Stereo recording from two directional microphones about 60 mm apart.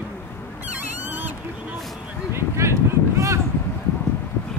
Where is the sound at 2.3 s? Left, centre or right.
Right.